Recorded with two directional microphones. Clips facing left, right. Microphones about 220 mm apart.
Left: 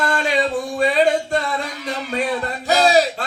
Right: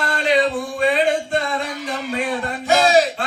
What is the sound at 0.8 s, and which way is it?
Music, 40° left (ahead or behind).